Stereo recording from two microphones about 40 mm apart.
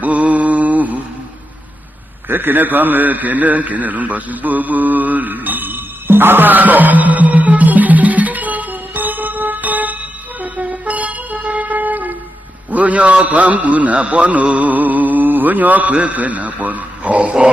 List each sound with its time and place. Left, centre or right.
0.0 s mantra: right
2.2 s a man's voice: right
10.4 s vehicle: right
12.7 s a man's voice: right